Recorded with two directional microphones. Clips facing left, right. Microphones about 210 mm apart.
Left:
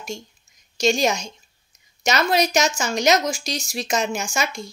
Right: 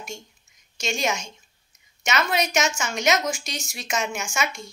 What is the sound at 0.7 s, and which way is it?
Speech, 35° left (ahead or behind).